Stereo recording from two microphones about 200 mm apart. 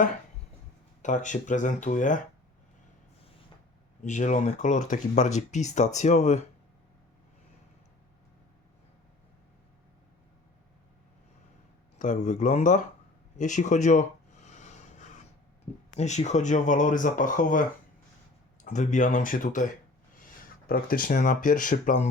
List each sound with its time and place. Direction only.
1.0 s speech: 40° left (ahead or behind)
4.0 s speech: 35° left (ahead or behind)
11.9 s speech: 40° left (ahead or behind)
14.5 s vehicle: 35° left (ahead or behind)
16.0 s speech: 35° left (ahead or behind)